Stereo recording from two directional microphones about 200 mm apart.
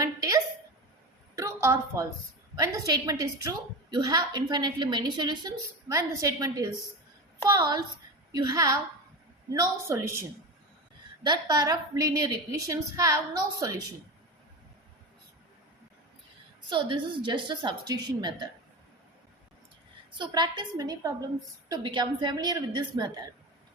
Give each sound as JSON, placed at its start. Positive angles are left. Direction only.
{"t": 0.0, "sound": "a sound", "side_deg": -15}
{"t": 1.4, "sound": "a woman's voice", "side_deg": -15}
{"t": 16.6, "sound": "a woman's voice", "side_deg": -25}
{"t": 20.1, "sound": "a woman's voice", "side_deg": -20}